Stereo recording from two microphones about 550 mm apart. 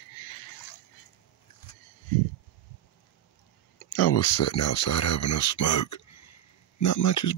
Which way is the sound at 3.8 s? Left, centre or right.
Left.